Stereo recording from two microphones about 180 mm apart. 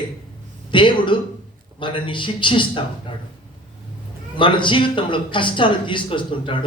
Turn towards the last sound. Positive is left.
turn(degrees=30)  # may be behind; listen again after turning